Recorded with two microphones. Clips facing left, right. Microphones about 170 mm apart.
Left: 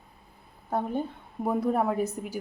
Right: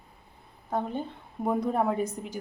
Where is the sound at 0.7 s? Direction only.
10° left (ahead or behind).